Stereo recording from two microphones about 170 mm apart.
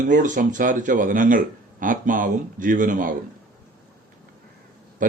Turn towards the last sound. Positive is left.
turn(degrees=-50)  # may be behind; listen again after turning